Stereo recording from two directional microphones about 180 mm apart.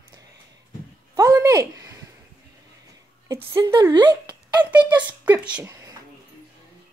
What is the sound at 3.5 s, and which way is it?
Speech, 20° right (ahead or behind).